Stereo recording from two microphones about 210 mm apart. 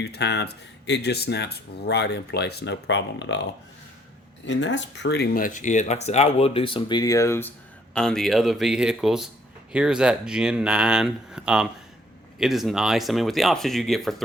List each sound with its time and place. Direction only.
0.0 s speech: 50° left (ahead or behind)
4.4 s speech: 60° left (ahead or behind); by 14.3 s centre (ahead or behind)